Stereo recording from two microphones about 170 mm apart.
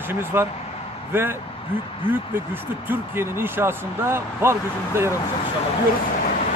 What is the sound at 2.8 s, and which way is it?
Speech, 15° right (ahead or behind).